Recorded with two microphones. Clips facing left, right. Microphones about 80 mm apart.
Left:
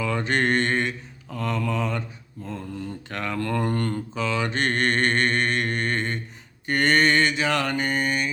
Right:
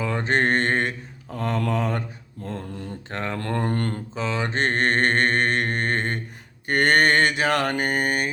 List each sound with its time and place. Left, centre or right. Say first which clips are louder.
0.0 s mantra: right 1 dB; right